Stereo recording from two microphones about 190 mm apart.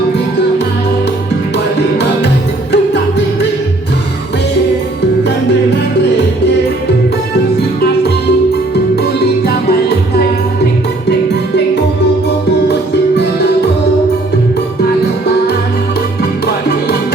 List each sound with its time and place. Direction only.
1.5 s music: 60° left (ahead or behind)
9.0 s music: 55° left (ahead or behind)
11.1 s music: 60° left (ahead or behind)